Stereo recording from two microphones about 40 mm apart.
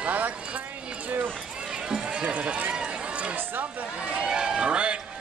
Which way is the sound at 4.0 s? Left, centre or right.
Right.